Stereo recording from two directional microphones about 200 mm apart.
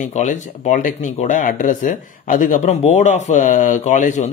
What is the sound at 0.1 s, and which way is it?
Speech, 35° left (ahead or behind).